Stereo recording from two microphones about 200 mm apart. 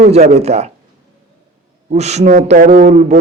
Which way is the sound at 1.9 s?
35° right (ahead or behind).